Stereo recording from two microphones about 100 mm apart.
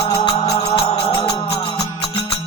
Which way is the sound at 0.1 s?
80° left.